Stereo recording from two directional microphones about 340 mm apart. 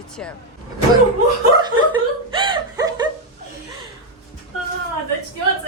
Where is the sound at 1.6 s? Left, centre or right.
Centre.